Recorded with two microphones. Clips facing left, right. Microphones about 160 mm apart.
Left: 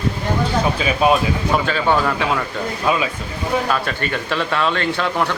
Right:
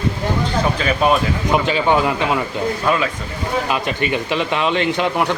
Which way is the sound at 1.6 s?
15° right (ahead or behind).